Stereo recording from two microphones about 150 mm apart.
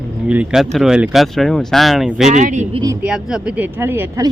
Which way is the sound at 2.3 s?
55° right (ahead or behind).